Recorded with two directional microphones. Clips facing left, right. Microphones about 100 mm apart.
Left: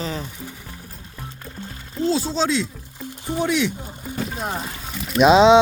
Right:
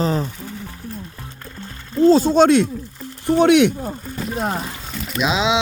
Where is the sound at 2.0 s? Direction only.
45° right (ahead or behind); by 3.7 s 65° right (ahead or behind).